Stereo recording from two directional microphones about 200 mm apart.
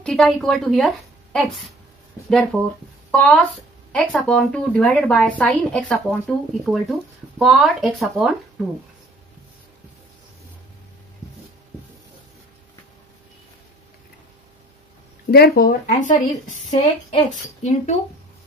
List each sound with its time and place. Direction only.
0.0 s a woman's voice: 5° left (ahead or behind)
15.3 s a woman's voice: 50° left (ahead or behind)